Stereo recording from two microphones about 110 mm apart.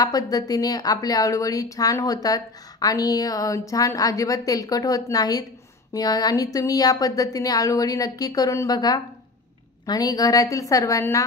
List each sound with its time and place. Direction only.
0.0 s a woman's voice: 35° left (ahead or behind)